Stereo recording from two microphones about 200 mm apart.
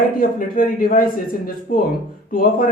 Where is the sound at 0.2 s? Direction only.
45° left (ahead or behind).